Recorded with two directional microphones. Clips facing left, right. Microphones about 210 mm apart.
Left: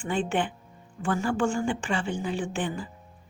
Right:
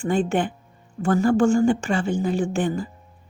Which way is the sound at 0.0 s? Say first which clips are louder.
Right 6 dB; 40° right (ahead or behind).